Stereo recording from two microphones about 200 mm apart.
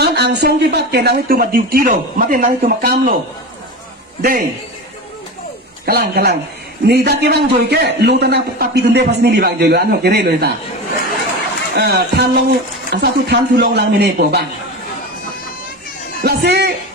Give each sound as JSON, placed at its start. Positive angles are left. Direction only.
{"t": 0.0, "sound": "speech", "side_deg": -55}
{"t": 4.2, "sound": "speech", "side_deg": -45}
{"t": 5.8, "sound": "a man's voice", "side_deg": -50}
{"t": 11.7, "sound": "a man's voice", "side_deg": -55}
{"t": 16.2, "sound": "a man's voice", "side_deg": -55}